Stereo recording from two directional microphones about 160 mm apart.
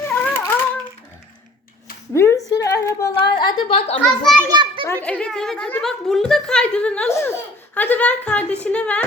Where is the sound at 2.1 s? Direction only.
20° left (ahead or behind).